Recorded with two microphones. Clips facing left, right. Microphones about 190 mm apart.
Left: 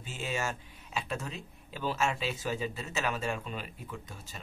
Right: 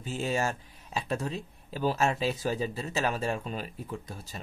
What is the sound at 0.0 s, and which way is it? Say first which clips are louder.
Speech: right 5 dB; 40° right (ahead or behind).